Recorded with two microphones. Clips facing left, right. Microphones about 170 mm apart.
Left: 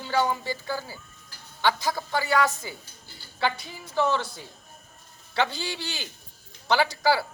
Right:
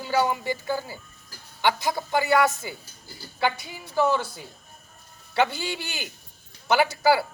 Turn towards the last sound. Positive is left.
turn(degrees=-15)  # may be behind; listen again after turning